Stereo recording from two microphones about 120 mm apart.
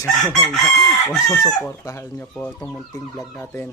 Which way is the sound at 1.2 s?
30° left (ahead or behind).